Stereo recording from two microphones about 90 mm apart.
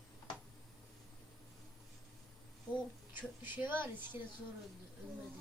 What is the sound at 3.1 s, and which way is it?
Speech, 20° right (ahead or behind).